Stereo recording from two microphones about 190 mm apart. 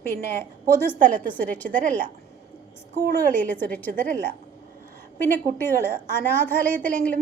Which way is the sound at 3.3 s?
10° left (ahead or behind).